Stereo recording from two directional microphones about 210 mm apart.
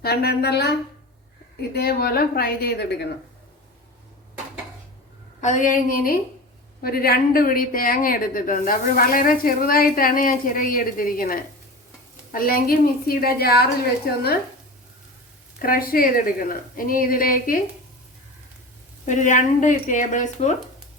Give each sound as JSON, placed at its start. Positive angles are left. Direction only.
{"t": 0.0, "sound": "a woman's voice", "side_deg": 50}
{"t": 5.4, "sound": "a woman's voice", "side_deg": 35}
{"t": 15.5, "sound": "a woman's voice", "side_deg": 45}
{"t": 19.0, "sound": "speech", "side_deg": 35}